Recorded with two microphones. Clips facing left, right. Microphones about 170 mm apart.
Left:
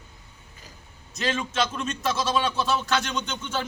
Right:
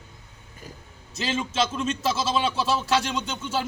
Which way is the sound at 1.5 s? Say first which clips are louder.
Right 2 dB; 5° right (ahead or behind).